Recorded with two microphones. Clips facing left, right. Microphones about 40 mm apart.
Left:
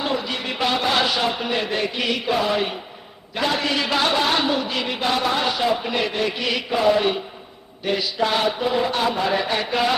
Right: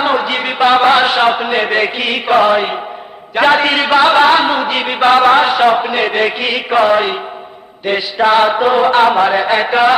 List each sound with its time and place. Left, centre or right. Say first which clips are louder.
0.0 s a sound: right 10 dB; right
0.6 s mantra: right 12 dB; right
0.9 s a man's voice: right 10 dB; right
5.6 s a man's voice: right 9 dB; right
6.3 s mantra: right 9 dB; right
8.7 s a man's voice: right 11 dB; right
9.2 s mantra: right 9 dB; right